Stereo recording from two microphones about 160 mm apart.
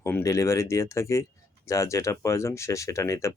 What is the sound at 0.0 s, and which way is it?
Speech, 15° left (ahead or behind).